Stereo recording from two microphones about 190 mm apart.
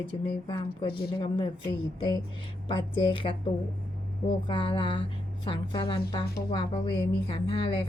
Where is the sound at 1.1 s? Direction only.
25° left (ahead or behind).